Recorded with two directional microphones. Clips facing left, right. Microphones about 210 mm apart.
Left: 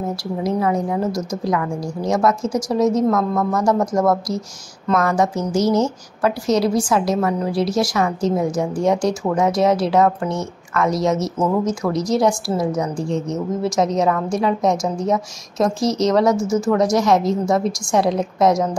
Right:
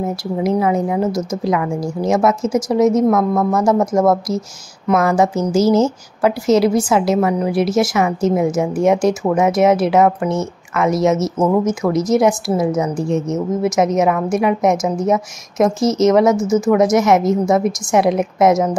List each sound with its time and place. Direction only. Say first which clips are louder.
0.4 s a woman's voice: right 4 dB; 20° right (ahead or behind)